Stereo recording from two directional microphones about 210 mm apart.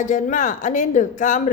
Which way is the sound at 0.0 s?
35° left (ahead or behind).